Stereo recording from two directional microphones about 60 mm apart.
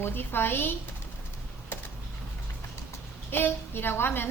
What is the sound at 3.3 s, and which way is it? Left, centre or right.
Speech, left.